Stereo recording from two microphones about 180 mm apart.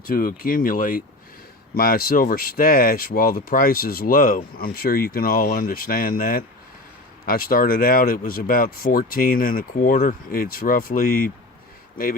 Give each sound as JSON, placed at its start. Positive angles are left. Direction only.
{"t": 0.0, "sound": "speech", "side_deg": 55}